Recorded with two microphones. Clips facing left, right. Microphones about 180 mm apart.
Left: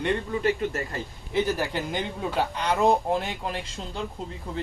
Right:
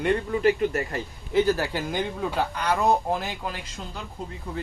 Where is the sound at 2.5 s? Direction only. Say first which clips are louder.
Right 1 dB; 25° left (ahead or behind).